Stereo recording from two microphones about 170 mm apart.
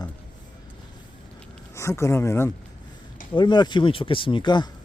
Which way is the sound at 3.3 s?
25° left (ahead or behind).